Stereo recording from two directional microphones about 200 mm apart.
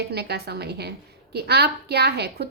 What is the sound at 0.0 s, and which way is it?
A woman's voice, 55° right (ahead or behind).